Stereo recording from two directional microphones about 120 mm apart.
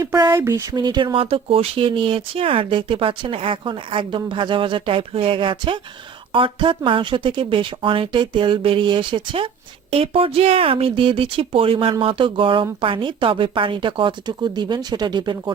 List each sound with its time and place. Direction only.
0.3 s speech: 25° right (ahead or behind)
0.8 s speech: 40° right (ahead or behind)